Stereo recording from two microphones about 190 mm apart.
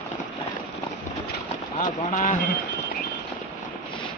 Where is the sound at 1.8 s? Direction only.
45° left (ahead or behind).